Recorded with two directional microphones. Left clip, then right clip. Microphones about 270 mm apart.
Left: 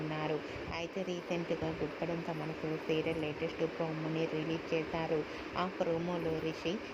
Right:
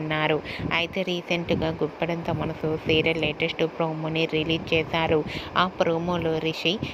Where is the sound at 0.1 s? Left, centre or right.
Right.